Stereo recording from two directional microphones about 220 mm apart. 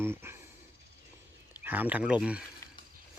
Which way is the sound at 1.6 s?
10° right (ahead or behind).